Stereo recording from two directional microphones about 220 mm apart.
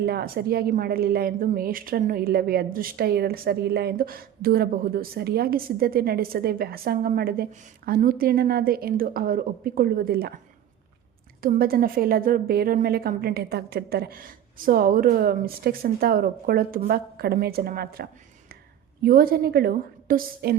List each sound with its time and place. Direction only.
0.0 s a woman's voice: 45° right (ahead or behind)